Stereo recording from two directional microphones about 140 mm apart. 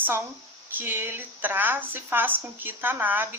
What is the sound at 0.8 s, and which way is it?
A woman's voice, 15° right (ahead or behind).